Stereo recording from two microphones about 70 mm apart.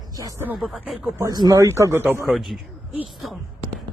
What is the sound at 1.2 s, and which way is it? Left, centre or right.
Speech, right.